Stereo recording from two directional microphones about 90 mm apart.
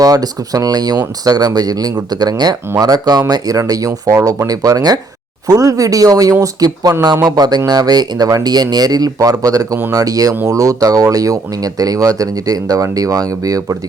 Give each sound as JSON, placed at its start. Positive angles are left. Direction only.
{"t": 0.0, "sound": "speech", "side_deg": -45}